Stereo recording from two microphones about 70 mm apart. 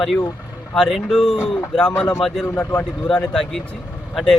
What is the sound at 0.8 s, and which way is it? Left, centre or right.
Speech, centre.